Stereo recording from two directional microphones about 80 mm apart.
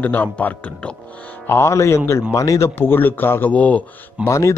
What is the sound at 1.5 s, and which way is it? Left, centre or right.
A man's voice, left.